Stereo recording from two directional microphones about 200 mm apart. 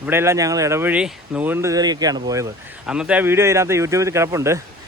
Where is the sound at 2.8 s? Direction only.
5° right (ahead or behind).